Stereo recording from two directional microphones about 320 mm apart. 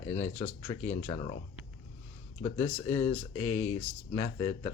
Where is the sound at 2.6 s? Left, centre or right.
Centre.